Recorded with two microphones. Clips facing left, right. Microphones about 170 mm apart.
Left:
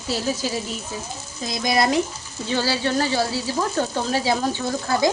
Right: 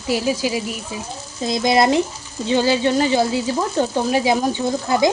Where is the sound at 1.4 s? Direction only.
25° right (ahead or behind).